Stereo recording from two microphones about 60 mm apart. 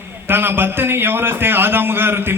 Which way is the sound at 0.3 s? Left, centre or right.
Right.